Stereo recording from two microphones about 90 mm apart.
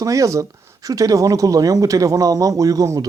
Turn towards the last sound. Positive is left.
turn(degrees=-40)  # may be behind; listen again after turning